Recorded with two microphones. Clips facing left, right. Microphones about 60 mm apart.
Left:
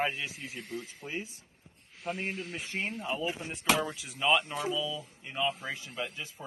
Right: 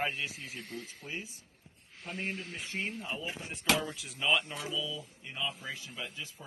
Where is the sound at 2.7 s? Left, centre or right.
Left.